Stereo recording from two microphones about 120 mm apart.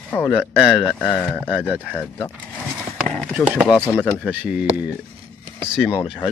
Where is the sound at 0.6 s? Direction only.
Centre (ahead or behind).